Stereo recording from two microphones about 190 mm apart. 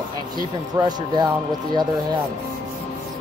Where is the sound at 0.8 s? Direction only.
20° right (ahead or behind).